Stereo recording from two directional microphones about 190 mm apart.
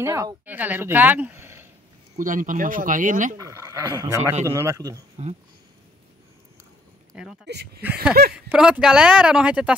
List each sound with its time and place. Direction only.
0.0 s a woman's voice: 15° right (ahead or behind)
2.1 s speech: 45° right (ahead or behind)
3.3 s speech: 15° right (ahead or behind)
5.2 s speech: 35° right (ahead or behind)
7.4 s speech: 60° right (ahead or behind)
7.8 s speech: 5° right (ahead or behind)